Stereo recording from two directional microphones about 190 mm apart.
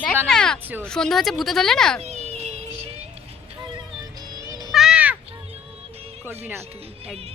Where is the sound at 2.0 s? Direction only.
35° right (ahead or behind).